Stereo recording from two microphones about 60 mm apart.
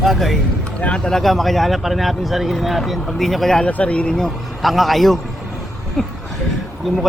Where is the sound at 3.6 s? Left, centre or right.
Left.